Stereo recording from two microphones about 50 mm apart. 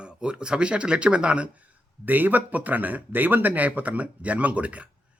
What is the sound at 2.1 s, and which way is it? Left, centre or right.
Speech, right.